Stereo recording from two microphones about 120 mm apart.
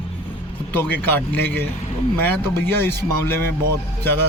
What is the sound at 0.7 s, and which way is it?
Speech, 15° left (ahead or behind).